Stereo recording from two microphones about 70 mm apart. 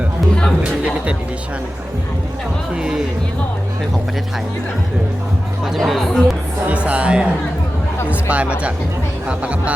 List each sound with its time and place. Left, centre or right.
0.6 s speech: centre
5.6 s speech: centre
6.7 s speech: centre